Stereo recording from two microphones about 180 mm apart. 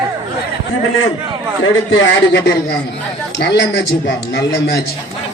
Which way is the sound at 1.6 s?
90° left.